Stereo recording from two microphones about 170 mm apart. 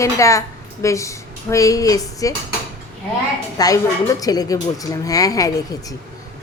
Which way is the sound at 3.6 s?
20° left (ahead or behind).